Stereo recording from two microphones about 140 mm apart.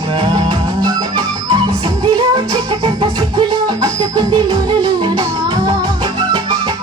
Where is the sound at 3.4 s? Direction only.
30° right (ahead or behind).